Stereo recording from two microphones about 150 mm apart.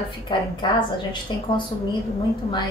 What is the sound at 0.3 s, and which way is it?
Speech, 30° left (ahead or behind).